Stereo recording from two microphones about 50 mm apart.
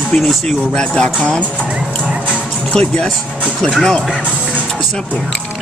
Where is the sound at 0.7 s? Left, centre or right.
Centre.